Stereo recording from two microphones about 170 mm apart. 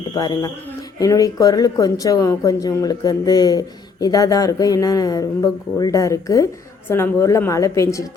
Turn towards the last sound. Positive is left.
turn(degrees=20)  # may be behind; listen again after turning